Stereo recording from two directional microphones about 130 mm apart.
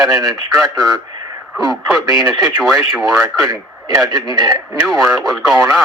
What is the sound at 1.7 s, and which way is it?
Speech, centre (ahead or behind).